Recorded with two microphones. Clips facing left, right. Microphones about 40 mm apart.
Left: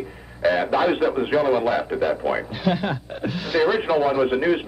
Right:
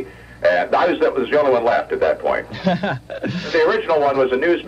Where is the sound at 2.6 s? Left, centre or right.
Centre.